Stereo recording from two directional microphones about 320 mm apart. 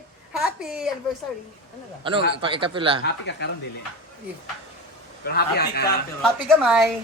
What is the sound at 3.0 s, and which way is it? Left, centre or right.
Speech, left.